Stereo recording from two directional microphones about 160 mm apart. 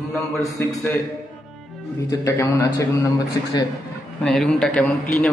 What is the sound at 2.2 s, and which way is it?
Speech, 20° left (ahead or behind).